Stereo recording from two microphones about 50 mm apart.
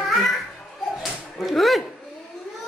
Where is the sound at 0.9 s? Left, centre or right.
Centre.